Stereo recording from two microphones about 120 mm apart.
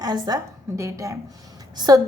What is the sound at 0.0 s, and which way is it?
A woman's voice, 35° right (ahead or behind).